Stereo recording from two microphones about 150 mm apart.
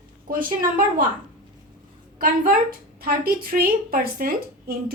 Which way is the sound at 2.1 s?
70° right (ahead or behind).